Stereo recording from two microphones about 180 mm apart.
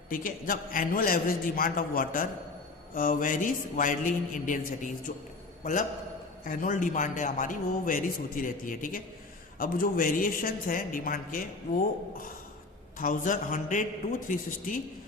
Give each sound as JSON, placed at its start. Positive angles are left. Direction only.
{"t": 0.1, "sound": "a man's voice", "side_deg": 50}
{"t": 6.4, "sound": "a man's voice", "side_deg": 45}
{"t": 13.0, "sound": "a man's voice", "side_deg": 50}